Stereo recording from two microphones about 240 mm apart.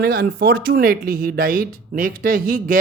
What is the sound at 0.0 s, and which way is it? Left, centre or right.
A man's voice, right.